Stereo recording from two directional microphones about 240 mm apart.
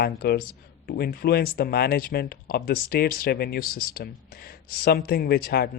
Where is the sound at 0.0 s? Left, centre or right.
Left.